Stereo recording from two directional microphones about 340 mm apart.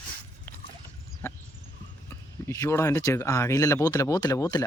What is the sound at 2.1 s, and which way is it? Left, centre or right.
Speech, centre.